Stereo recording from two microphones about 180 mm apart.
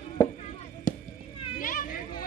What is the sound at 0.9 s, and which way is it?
Chop, 50° left (ahead or behind).